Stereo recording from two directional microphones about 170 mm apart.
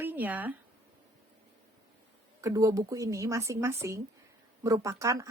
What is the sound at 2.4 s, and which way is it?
A woman's voice, 20° right (ahead or behind).